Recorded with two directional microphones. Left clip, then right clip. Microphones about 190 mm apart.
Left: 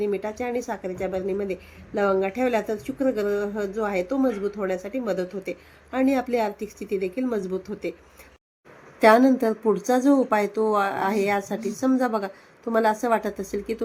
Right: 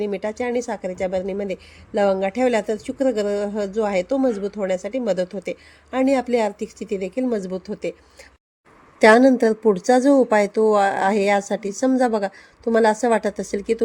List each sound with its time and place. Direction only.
0.0 s speech: 40° right (ahead or behind)
9.0 s speech: 40° right (ahead or behind)